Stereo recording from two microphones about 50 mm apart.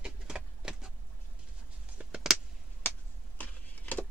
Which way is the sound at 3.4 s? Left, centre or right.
Left.